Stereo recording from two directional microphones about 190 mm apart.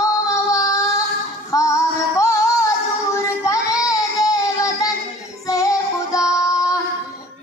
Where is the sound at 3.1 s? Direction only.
15° left (ahead or behind).